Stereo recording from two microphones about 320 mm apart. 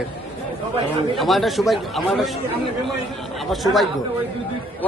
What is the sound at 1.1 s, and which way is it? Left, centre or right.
Speech, centre.